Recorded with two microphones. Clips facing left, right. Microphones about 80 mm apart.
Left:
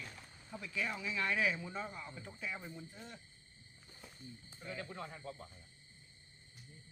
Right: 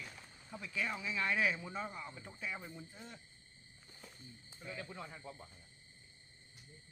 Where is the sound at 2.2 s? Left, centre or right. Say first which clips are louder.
Left 2 dB; centre.